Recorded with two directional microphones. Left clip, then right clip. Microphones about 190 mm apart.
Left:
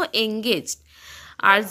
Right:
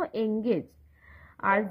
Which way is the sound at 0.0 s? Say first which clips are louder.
Left 7 dB; 30° left (ahead or behind).